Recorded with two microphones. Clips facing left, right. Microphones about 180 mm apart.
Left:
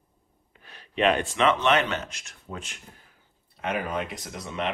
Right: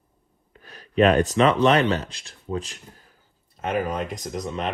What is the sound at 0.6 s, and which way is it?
Speech, 40° right (ahead or behind).